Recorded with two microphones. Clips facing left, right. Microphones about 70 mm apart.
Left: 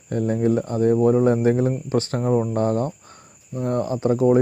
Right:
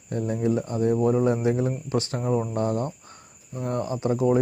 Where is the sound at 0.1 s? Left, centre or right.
Left.